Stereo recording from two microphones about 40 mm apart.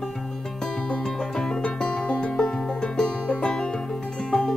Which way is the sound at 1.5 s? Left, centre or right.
Centre.